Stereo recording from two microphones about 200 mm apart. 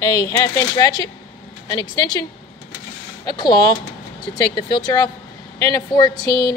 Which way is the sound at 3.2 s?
20° left (ahead or behind).